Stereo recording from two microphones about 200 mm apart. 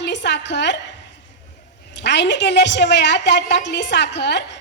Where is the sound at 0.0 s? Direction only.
60° left (ahead or behind).